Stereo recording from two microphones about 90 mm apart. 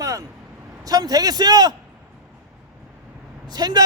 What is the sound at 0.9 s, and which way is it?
Speech, 45° right (ahead or behind).